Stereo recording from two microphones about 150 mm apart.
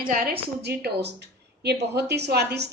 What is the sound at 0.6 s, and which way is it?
A woman's voice, 90° right.